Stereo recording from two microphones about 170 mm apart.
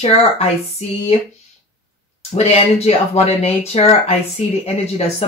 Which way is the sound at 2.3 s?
40° left (ahead or behind).